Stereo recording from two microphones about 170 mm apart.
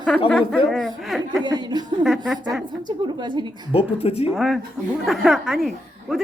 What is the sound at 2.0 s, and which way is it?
Speech, centre (ahead or behind).